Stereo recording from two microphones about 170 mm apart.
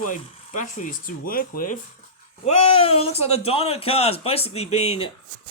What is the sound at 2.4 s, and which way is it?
Speech, 40° left (ahead or behind).